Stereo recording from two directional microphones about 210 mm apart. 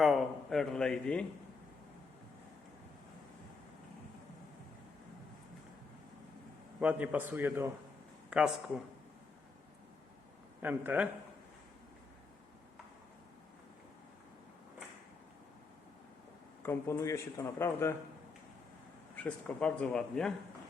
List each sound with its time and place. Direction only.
0.0 s a man's voice: centre (ahead or behind)
6.7 s a man's voice: 5° right (ahead or behind)
10.6 s a man's voice: 10° right (ahead or behind)
16.6 s speech: 10° left (ahead or behind)
19.1 s speech: 5° left (ahead or behind)